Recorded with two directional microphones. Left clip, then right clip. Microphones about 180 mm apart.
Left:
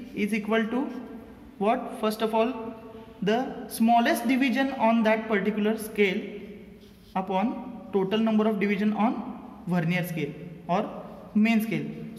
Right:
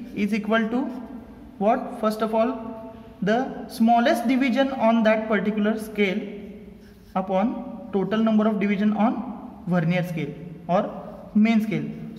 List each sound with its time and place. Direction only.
0.1 s speech: 20° right (ahead or behind)
7.2 s a man's voice: 20° right (ahead or behind)